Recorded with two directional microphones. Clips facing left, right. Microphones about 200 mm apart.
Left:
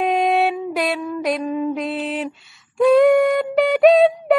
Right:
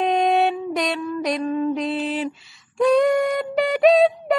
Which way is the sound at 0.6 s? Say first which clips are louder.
Left 2 dB; 5° left (ahead or behind).